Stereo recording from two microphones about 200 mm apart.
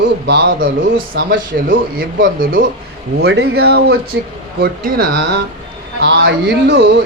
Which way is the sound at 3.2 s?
55° right (ahead or behind).